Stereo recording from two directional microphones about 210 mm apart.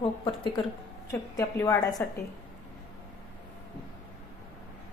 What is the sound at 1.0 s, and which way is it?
A woman's voice, 15° left (ahead or behind).